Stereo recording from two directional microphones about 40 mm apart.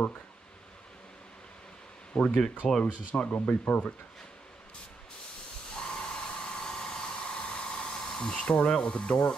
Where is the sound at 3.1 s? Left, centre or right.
Left.